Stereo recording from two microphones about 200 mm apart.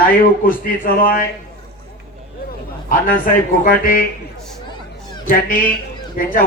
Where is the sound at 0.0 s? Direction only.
45° left (ahead or behind).